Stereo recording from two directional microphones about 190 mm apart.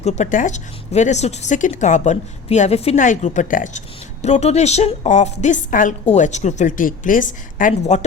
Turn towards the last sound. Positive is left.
turn(degrees=40)  # may be behind; listen again after turning